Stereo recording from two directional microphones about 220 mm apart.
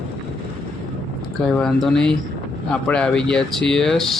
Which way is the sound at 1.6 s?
Centre (ahead or behind).